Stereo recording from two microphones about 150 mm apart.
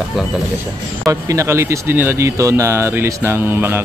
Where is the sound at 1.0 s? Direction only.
20° right (ahead or behind).